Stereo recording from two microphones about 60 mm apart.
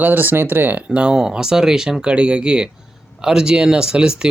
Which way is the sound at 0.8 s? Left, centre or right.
Centre.